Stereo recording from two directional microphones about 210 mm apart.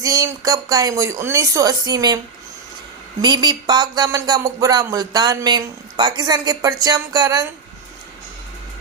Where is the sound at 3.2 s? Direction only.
20° right (ahead or behind).